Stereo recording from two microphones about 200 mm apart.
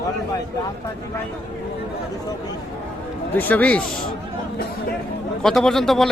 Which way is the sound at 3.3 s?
10° left (ahead or behind).